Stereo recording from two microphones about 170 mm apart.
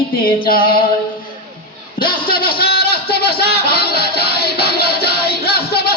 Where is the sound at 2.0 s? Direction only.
60° left (ahead or behind).